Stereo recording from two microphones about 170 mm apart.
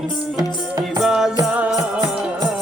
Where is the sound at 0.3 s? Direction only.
25° right (ahead or behind).